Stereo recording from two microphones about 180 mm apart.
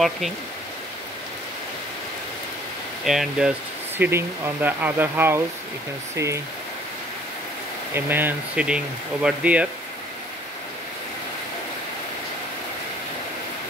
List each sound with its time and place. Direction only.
3.1 s speech: 5° right (ahead or behind)
7.9 s speech: 10° right (ahead or behind)